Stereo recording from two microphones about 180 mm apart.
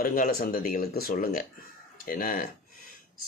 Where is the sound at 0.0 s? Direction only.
50° left (ahead or behind).